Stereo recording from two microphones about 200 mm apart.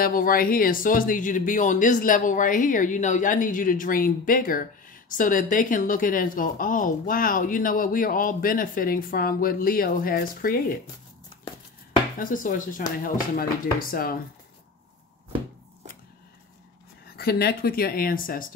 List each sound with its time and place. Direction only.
0.0 s speech: 45° left (ahead or behind)
12.2 s speech: 40° left (ahead or behind)
17.1 s speech: 50° left (ahead or behind)